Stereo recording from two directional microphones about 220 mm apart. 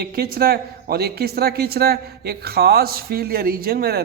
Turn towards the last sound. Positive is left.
turn(degrees=-45)  # may be behind; listen again after turning